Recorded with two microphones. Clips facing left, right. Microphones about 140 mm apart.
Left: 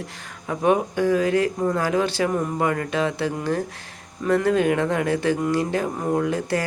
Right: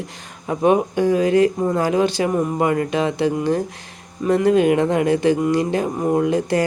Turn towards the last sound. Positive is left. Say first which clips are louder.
# right 5 dB
turn(degrees=-20)  # may be behind; listen again after turning